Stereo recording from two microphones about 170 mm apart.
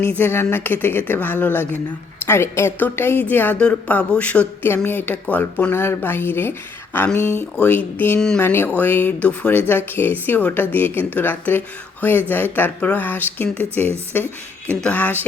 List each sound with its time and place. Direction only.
0.0 s speech: 15° left (ahead or behind)